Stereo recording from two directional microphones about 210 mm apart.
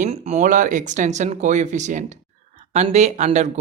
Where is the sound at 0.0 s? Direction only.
35° right (ahead or behind).